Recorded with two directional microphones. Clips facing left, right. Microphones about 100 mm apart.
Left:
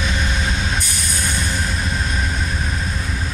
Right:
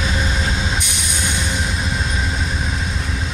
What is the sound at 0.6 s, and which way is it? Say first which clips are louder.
Music: right 1 dB; 20° right (ahead or behind).